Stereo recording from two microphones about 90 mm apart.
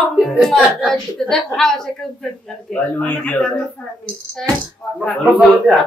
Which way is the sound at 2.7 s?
15° left (ahead or behind).